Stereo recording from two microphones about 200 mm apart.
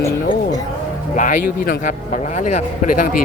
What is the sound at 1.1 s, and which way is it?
A man's voice, 40° left (ahead or behind).